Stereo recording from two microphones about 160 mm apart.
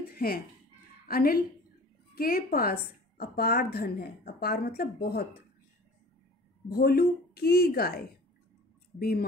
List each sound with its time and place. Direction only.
0.1 s a sound: 70° left (ahead or behind)
1.0 s a woman's voice: 70° left (ahead or behind)
6.7 s a woman's voice: 70° left (ahead or behind)